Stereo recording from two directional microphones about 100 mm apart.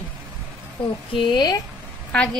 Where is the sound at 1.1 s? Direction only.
55° left (ahead or behind).